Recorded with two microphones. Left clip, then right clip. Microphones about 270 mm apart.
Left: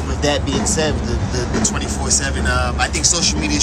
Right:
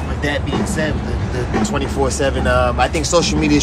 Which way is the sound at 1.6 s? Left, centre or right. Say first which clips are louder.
Right 3 dB; centre.